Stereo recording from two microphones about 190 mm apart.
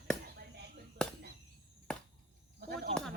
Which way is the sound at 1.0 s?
5° left (ahead or behind).